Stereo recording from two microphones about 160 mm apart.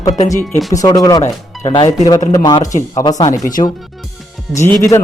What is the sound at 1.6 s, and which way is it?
Speech, 35° left (ahead or behind).